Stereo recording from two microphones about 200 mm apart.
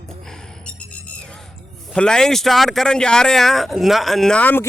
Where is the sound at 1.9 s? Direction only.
5° left (ahead or behind).